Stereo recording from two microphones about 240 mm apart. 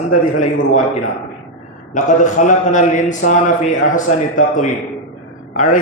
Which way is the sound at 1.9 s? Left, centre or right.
Left.